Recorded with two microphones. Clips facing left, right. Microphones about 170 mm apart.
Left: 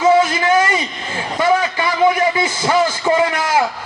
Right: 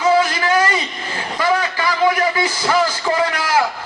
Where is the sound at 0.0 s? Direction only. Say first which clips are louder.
Left 3 dB; 25° left (ahead or behind).